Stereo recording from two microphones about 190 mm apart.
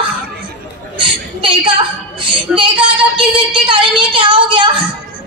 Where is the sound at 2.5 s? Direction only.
5° right (ahead or behind).